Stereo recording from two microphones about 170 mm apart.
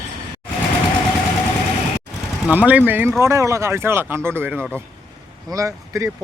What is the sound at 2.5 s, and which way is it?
Speech, 10° right (ahead or behind).